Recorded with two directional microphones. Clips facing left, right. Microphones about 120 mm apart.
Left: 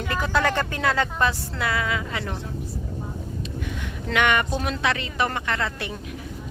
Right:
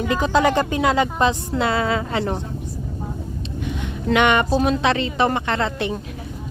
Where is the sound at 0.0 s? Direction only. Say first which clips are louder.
Right 6 dB; 20° right (ahead or behind).